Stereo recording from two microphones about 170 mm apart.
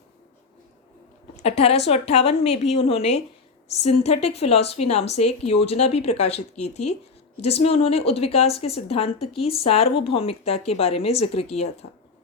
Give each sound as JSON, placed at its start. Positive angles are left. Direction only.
{"t": 1.4, "sound": "speech", "side_deg": 40}